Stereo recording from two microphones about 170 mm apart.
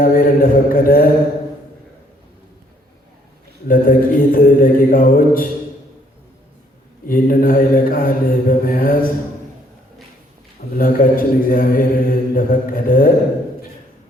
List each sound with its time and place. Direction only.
0.0 s a sound: 55° left (ahead or behind)
3.7 s speech: 55° left (ahead or behind)
7.1 s speech: 55° left (ahead or behind)
10.8 s speech: 55° left (ahead or behind)